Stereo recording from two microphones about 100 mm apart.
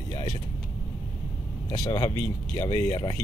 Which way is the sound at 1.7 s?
45° left (ahead or behind).